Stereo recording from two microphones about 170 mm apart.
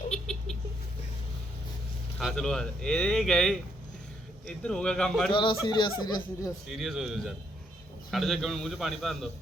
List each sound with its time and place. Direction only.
0.1 s rodents: 5° left (ahead or behind)
2.1 s speech: 5° left (ahead or behind)
5.3 s speech: 30° left (ahead or behind)
6.7 s speech: centre (ahead or behind)